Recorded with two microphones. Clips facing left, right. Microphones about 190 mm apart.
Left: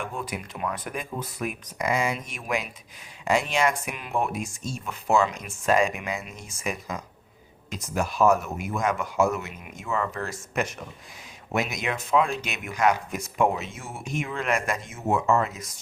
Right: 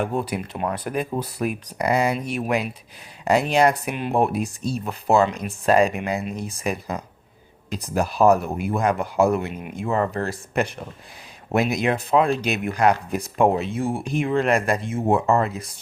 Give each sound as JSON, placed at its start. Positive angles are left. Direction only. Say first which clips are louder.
{"t": 0.0, "sound": "speech", "louder": "right 8 dB", "side_deg": -40}